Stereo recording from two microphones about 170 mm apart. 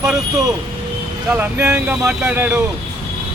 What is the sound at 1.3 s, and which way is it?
Speech, 10° right (ahead or behind).